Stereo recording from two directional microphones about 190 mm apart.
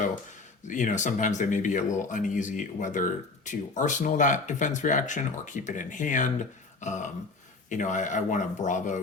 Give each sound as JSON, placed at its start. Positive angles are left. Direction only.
{"t": 0.7, "sound": "speech", "side_deg": 40}
{"t": 6.7, "sound": "a sound", "side_deg": 40}
{"t": 7.7, "sound": "speech", "side_deg": 40}